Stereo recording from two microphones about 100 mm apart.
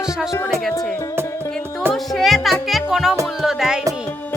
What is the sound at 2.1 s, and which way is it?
Music, centre (ahead or behind).